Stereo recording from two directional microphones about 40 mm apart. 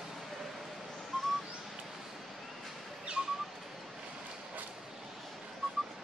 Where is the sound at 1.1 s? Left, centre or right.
Centre.